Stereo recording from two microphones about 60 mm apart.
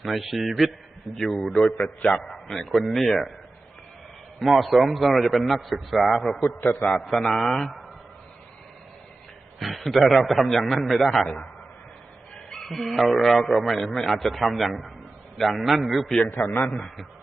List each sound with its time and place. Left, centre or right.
0.0 s a man's voice: centre
4.4 s a man's voice: centre
6.6 s a man's voice: left
7.0 s a man's voice: centre
9.6 s a man's voice: centre
12.5 s a man's voice: centre
16.4 s a man's voice: left